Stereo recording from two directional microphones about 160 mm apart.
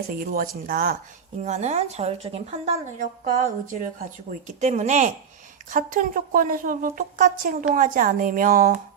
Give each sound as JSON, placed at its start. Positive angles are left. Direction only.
{"t": 0.1, "sound": "a woman's voice", "side_deg": -70}
{"t": 1.5, "sound": "a woman's voice", "side_deg": -45}